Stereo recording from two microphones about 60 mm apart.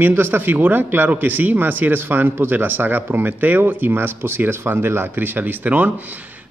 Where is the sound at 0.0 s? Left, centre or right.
Right.